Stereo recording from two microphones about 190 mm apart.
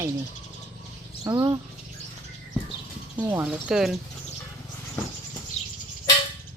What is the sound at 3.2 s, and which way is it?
Speech, 10° right (ahead or behind).